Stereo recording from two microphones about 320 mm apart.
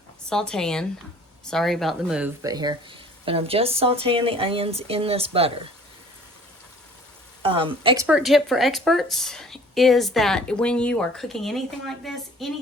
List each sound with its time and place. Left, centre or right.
0.3 s a woman's voice: centre
7.4 s speech: centre
8.0 s a woman's voice: centre